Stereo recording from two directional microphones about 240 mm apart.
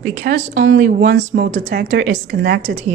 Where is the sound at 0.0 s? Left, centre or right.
Right.